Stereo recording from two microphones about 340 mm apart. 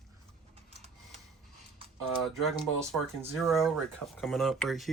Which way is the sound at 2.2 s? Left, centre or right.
Centre.